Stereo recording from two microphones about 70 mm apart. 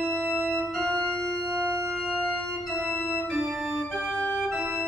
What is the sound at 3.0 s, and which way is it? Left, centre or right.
Organ, left.